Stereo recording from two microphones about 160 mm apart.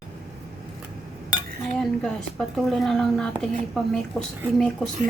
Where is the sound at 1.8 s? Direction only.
5° left (ahead or behind).